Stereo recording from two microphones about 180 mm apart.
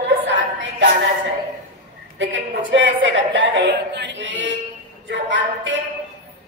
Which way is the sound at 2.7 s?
85° right.